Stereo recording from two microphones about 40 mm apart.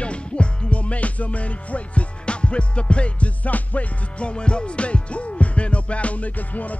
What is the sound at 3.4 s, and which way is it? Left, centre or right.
Music, left.